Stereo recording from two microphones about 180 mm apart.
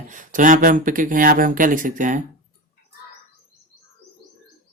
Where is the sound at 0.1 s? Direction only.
45° right (ahead or behind).